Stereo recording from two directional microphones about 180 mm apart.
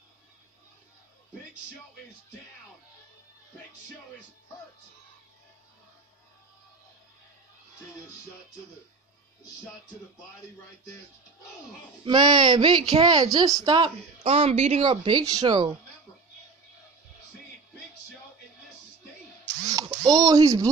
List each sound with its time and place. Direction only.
12.0 s speech: 25° right (ahead or behind)
19.4 s a sound: 20° right (ahead or behind)
20.1 s speech: 20° right (ahead or behind)